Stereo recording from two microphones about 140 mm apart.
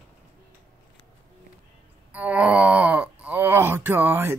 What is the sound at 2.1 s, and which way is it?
Speech, 10° right (ahead or behind).